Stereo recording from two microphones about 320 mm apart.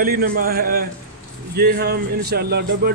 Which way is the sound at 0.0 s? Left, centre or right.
Right.